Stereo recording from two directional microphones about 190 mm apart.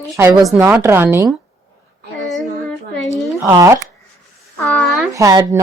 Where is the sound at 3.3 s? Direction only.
15° right (ahead or behind).